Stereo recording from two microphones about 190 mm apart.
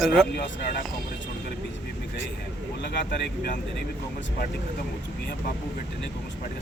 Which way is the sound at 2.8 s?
60° left (ahead or behind).